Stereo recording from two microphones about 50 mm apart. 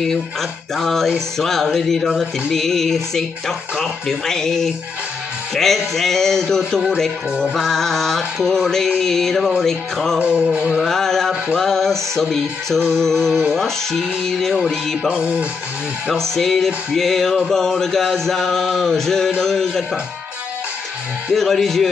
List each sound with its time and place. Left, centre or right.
0.0 s music: centre
7.5 s music: centre
10.2 s music: right
10.8 s music: centre
15.0 s music: right
16.2 s music: centre
21.4 s music: centre